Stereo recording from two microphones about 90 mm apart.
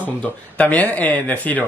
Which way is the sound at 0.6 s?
15° left (ahead or behind).